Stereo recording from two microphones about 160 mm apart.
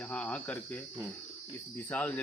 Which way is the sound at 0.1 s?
5° left (ahead or behind).